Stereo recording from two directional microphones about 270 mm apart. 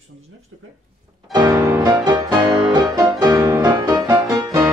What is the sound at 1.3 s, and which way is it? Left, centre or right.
Music, centre.